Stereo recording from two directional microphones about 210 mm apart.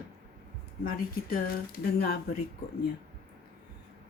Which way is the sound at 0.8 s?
40° left (ahead or behind).